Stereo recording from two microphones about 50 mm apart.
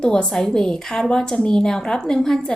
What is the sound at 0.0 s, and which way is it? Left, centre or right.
Speech, centre.